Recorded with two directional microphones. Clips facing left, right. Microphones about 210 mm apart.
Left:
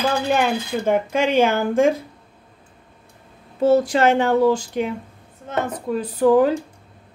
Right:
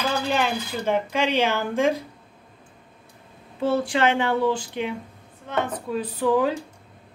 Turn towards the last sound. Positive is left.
turn(degrees=45)  # may be behind; listen again after turning